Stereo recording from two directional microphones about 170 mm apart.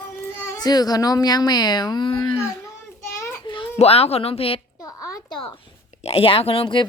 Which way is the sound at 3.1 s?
15° left (ahead or behind).